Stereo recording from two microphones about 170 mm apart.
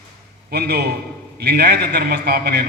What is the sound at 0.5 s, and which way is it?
A man's voice, 70° right (ahead or behind).